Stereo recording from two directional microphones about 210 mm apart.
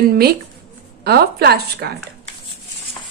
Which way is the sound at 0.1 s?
45° right (ahead or behind).